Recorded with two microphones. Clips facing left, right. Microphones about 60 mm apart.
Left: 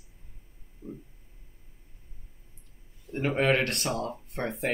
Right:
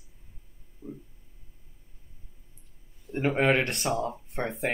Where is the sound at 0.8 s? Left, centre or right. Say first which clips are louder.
Even; right.